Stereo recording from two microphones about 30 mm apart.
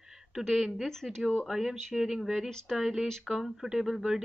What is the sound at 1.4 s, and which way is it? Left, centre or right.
Speech, centre.